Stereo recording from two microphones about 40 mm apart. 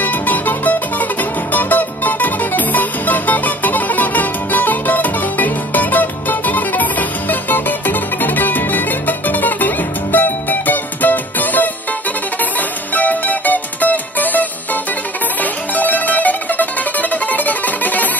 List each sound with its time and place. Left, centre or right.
0.0 s music: left
12.9 s music: left
15.7 s music: left